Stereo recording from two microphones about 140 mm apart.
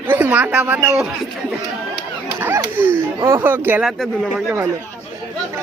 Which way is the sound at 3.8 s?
Centre (ahead or behind).